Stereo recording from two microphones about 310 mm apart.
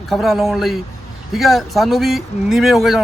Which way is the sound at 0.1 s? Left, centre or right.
Centre.